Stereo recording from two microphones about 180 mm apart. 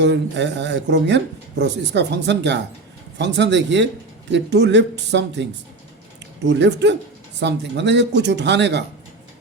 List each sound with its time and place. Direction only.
0.0 s speech: 75° right (ahead or behind)